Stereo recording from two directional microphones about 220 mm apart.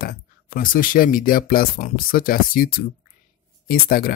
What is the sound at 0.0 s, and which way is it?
Speech, 40° left (ahead or behind).